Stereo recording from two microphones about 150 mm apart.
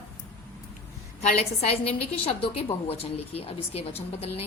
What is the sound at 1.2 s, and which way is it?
A woman's voice, 45° left (ahead or behind).